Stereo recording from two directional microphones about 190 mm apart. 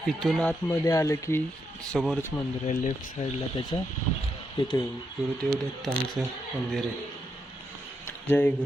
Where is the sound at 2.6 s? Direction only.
40° left (ahead or behind).